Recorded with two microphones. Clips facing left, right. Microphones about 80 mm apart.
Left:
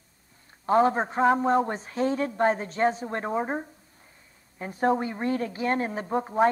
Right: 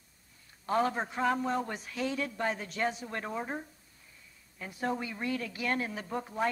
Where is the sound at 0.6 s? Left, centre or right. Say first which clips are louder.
Left 8 dB; left.